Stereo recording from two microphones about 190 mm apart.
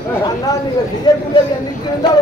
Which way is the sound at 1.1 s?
25° left (ahead or behind).